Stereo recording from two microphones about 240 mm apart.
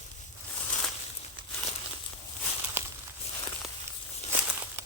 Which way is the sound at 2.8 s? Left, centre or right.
Centre.